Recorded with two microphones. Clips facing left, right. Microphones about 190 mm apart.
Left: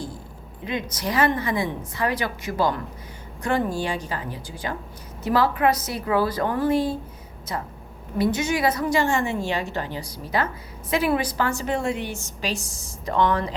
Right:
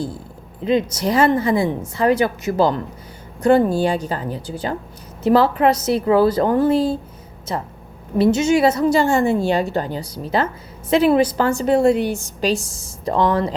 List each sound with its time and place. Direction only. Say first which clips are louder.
0.6 s a woman's voice: right 10 dB; 30° right (ahead or behind)
8.2 s a woman's voice: right 7 dB; 25° right (ahead or behind)